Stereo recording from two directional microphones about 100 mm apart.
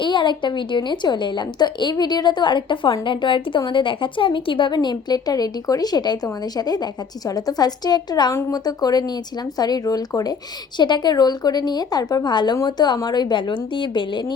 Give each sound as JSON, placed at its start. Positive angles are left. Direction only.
{"t": 0.0, "sound": "a woman's voice", "side_deg": 50}